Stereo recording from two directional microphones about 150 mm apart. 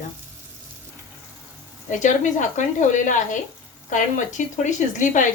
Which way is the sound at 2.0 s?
55° left (ahead or behind).